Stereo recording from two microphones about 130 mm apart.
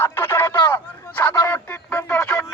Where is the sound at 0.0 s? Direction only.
15° left (ahead or behind).